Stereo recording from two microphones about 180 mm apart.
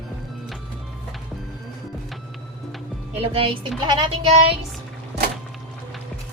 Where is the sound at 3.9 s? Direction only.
25° right (ahead or behind).